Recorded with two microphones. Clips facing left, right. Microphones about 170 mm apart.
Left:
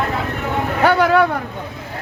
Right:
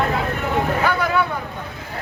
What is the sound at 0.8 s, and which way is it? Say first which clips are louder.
Speech: left 6 dB; 75° left (ahead or behind).